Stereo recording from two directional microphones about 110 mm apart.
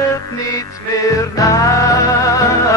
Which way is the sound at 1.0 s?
30° left (ahead or behind).